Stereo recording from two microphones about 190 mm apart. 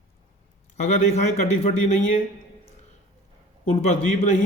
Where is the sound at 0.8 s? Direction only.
35° left (ahead or behind).